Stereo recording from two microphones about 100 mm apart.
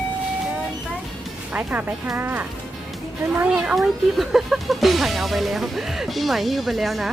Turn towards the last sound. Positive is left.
turn(degrees=0)  # may be behind; listen again after turning